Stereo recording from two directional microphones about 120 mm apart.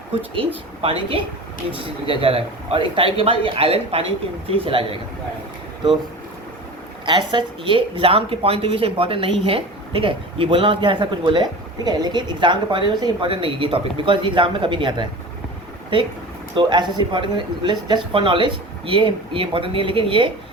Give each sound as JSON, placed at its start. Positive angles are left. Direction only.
{"t": 0.3, "sound": "speech", "side_deg": -50}
{"t": 7.0, "sound": "a woman's voice", "side_deg": -40}